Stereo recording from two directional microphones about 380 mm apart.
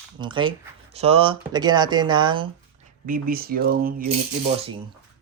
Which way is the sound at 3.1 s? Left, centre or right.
Right.